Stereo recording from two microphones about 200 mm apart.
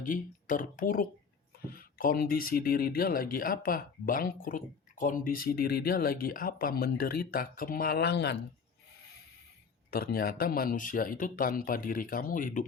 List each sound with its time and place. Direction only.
0.0 s speech: 40° left (ahead or behind)
9.9 s speech: 50° left (ahead or behind)